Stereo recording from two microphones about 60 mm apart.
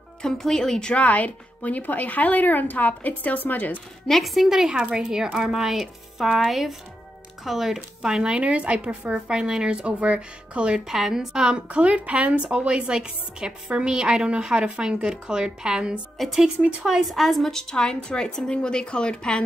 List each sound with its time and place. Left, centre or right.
0.2 s a woman's voice: centre
1.0 s a woman's voice: left
4.1 s a woman's voice: centre
10.9 s a woman's voice: centre
16.2 s a woman's voice: centre